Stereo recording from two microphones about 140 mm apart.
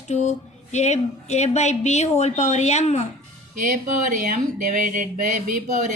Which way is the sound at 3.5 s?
70° right (ahead or behind).